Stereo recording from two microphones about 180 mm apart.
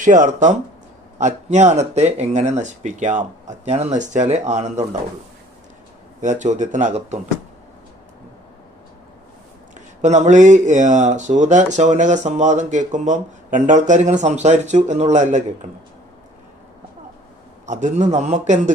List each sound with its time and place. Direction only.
0.0 s speech: 45° right (ahead or behind)
6.2 s speech: 40° right (ahead or behind)
9.7 s speech: 40° right (ahead or behind)
17.7 s speech: 45° right (ahead or behind)